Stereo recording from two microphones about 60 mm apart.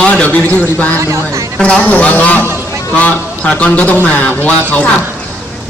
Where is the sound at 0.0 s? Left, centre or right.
Left.